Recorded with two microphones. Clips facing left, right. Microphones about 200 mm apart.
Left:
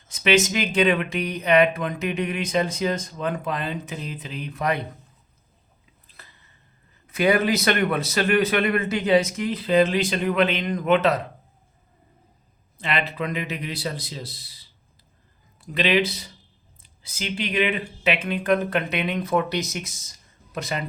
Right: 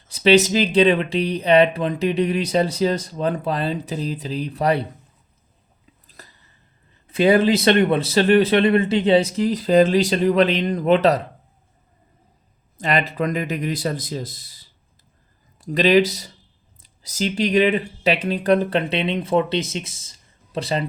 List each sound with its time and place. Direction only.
0.1 s speech: 35° right (ahead or behind)
6.2 s a sound: 40° right (ahead or behind)
7.1 s speech: 30° right (ahead or behind)
12.8 s speech: 40° right (ahead or behind)